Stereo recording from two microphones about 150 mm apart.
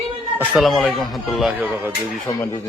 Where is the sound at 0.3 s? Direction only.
Centre (ahead or behind).